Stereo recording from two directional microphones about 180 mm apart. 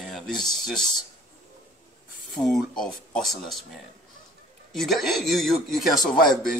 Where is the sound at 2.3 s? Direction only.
Centre (ahead or behind).